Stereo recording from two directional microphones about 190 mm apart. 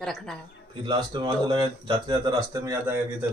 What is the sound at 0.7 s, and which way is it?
Speech, 25° right (ahead or behind).